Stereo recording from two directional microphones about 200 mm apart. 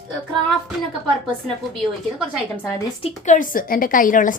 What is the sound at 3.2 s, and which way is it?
Speech, 40° left (ahead or behind).